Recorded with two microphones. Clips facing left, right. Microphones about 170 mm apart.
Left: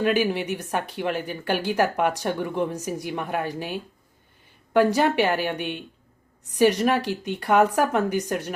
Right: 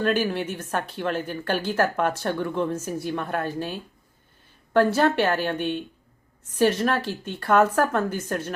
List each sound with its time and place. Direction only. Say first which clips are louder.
0.0 s speech: left 1 dB; 15° left (ahead or behind)